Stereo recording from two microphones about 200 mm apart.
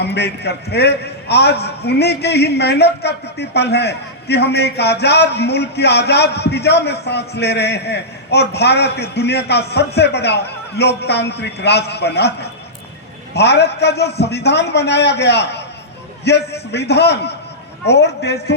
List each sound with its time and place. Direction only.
0.0 s a man's voice: 55° left (ahead or behind)